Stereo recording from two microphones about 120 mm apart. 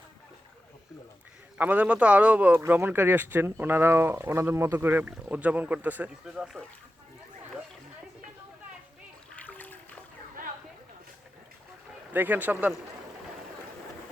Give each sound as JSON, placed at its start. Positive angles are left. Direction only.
{"t": 1.5, "sound": "speech", "side_deg": -15}
{"t": 9.3, "sound": "splash", "side_deg": 10}
{"t": 12.1, "sound": "speech", "side_deg": -15}